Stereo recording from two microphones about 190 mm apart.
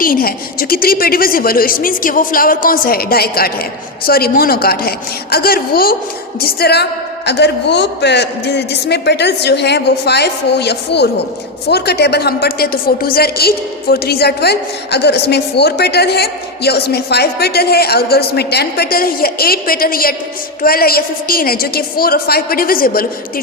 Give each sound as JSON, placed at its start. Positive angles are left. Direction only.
{"t": 0.0, "sound": "a woman's voice", "side_deg": 50}